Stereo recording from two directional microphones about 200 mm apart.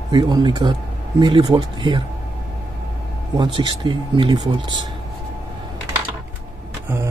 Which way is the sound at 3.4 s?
20° right (ahead or behind).